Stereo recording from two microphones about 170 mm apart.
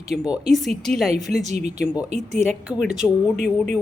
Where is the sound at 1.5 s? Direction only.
40° right (ahead or behind).